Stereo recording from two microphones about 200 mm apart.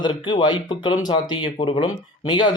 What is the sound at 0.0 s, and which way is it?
Speech, 20° left (ahead or behind).